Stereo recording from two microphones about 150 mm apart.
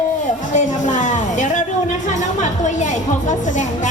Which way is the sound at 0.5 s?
55° left (ahead or behind).